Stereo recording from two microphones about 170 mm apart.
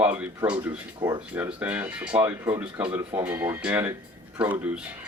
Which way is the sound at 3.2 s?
15° right (ahead or behind).